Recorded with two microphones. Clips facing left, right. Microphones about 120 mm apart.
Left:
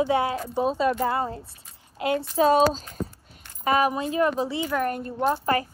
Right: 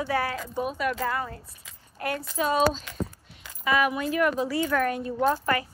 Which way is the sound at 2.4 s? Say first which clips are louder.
Left 4 dB; 35° left (ahead or behind).